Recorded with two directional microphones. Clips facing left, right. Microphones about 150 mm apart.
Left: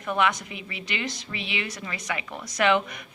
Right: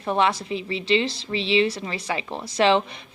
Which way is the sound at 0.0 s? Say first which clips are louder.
Right 3 dB; 30° right (ahead or behind).